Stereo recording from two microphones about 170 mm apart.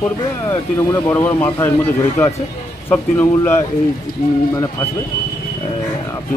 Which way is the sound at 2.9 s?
15° left (ahead or behind).